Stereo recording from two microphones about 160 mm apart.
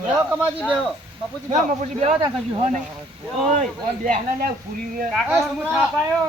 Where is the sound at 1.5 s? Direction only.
45° right (ahead or behind).